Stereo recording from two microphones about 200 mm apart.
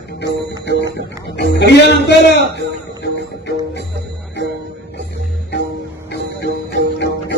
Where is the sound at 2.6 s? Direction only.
60° left (ahead or behind).